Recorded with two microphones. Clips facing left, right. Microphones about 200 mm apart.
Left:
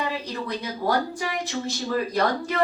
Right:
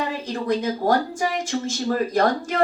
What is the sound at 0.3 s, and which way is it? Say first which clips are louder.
Speech: right 7 dB; 50° right (ahead or behind).